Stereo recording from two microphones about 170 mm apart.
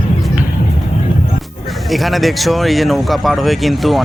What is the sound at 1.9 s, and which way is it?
Speech, centre (ahead or behind).